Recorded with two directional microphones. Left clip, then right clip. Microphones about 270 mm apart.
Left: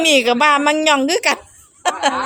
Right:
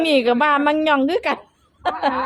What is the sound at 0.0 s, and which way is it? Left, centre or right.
A woman's voice, centre.